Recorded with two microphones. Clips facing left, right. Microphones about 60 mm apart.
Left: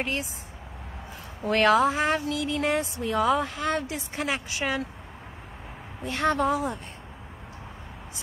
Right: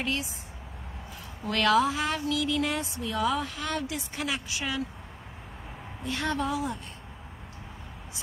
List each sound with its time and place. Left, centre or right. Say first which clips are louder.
0.0 s speech: left 1 dB; left
1.4 s speech: left 3 dB; left
6.0 s speech: left 5 dB; left